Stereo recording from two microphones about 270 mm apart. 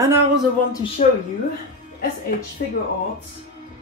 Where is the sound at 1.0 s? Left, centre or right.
Left.